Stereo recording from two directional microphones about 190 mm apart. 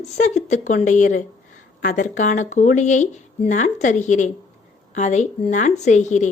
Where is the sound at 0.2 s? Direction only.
40° left (ahead or behind).